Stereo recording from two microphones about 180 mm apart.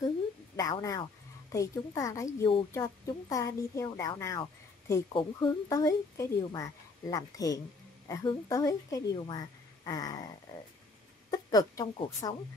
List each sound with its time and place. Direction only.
0.6 s a sound: 20° left (ahead or behind)
1.5 s a woman's voice: 15° left (ahead or behind)
11.2 s speech: 20° left (ahead or behind)